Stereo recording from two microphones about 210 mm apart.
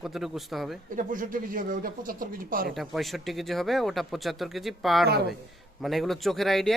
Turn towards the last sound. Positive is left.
turn(degrees=0)  # may be behind; listen again after turning